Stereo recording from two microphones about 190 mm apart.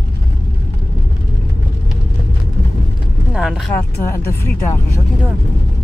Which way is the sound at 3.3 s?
5° right (ahead or behind).